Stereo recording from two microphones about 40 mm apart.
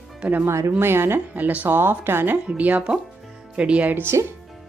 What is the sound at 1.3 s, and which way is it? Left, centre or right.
Speech, right.